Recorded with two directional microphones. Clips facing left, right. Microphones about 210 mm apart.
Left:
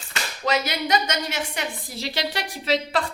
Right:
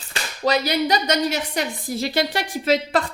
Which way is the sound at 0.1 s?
35° right (ahead or behind).